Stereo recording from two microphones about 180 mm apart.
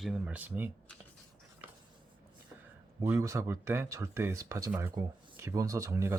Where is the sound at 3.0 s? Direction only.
15° right (ahead or behind).